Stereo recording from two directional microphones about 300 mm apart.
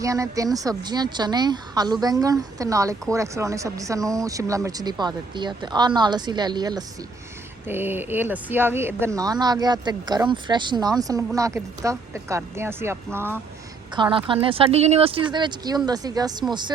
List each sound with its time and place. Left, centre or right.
0.0 s a woman's voice: centre